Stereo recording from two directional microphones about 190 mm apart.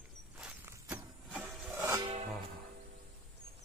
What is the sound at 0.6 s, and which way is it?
Vehicle, 15° right (ahead or behind).